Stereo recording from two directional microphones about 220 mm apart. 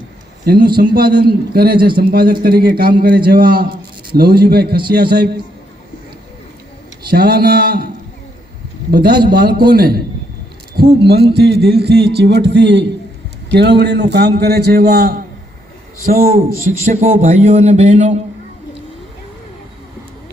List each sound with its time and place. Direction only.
0.4 s a man's voice: 45° right (ahead or behind)
7.1 s a man's voice: 45° right (ahead or behind)
8.9 s a man's voice: 45° right (ahead or behind)